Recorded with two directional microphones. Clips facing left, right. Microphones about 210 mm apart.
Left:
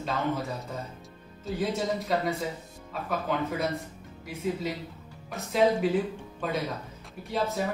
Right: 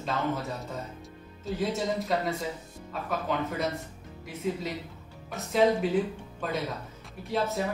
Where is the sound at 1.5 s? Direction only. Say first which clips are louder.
Even; centre (ahead or behind).